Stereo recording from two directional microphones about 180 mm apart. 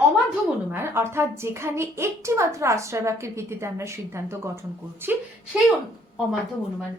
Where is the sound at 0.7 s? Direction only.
15° right (ahead or behind).